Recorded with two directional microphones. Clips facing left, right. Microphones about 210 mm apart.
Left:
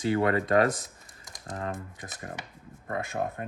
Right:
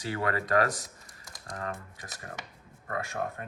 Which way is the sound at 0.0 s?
25° left (ahead or behind).